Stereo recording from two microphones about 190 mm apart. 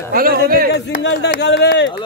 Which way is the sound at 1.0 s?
65° left (ahead or behind).